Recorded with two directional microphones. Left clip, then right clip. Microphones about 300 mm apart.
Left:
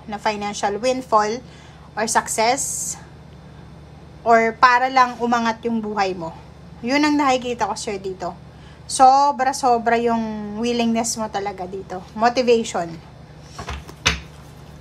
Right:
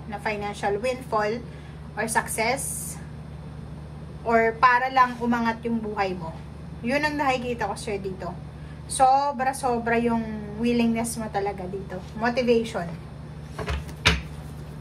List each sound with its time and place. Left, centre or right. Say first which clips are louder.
0.1 s a woman's voice: left 6 dB; centre
4.3 s a woman's voice: left 5 dB; centre